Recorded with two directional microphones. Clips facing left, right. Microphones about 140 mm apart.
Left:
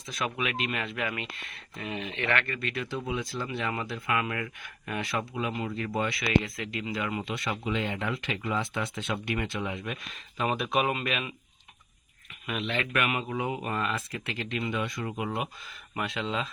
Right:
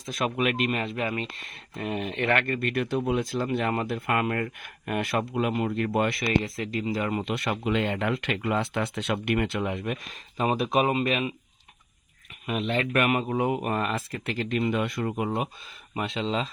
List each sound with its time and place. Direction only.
0.0 s speech: 50° right (ahead or behind); by 11.3 s 30° right (ahead or behind)
12.5 s speech: 40° right (ahead or behind); by 15.1 s 55° right (ahead or behind)
16.0 s speech: 25° right (ahead or behind)